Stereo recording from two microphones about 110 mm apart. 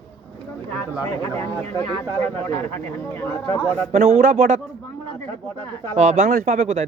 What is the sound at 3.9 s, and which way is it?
Speech, 75° right (ahead or behind).